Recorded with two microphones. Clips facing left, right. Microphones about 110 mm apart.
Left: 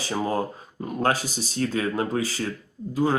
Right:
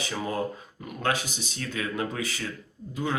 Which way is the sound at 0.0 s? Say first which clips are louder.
Left 4 dB; 35° left (ahead or behind).